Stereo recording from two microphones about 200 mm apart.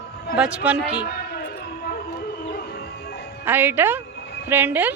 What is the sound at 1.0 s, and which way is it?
Music, 50° left (ahead or behind).